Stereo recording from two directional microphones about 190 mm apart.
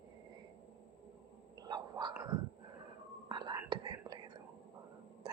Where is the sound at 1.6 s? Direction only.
25° right (ahead or behind).